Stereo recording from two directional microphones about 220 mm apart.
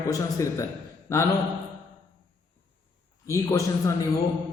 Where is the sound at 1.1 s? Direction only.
15° left (ahead or behind).